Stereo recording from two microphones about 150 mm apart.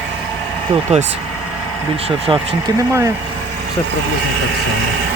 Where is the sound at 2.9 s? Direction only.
20° right (ahead or behind).